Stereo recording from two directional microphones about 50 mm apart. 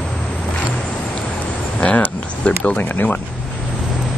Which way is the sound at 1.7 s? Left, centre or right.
Left.